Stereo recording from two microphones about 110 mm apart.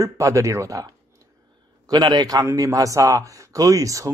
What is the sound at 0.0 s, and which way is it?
A man's voice, 30° right (ahead or behind).